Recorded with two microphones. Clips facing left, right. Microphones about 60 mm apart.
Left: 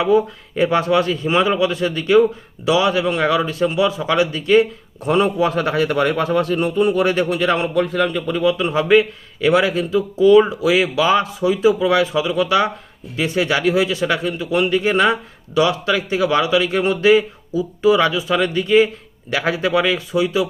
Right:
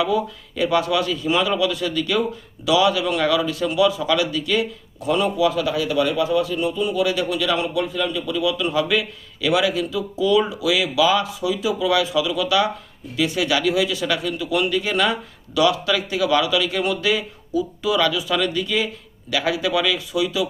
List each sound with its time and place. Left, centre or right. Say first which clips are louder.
0.0 s a man's voice: left 5 dB; left